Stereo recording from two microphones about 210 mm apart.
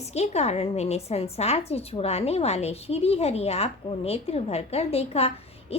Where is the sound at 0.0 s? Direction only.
30° left (ahead or behind).